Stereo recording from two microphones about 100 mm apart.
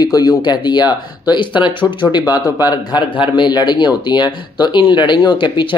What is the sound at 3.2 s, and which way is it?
Speech, 50° left (ahead or behind).